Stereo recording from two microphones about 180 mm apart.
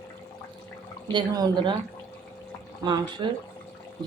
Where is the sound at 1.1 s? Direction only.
25° right (ahead or behind).